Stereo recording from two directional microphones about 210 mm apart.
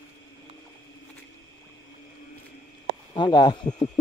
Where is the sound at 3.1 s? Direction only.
20° left (ahead or behind).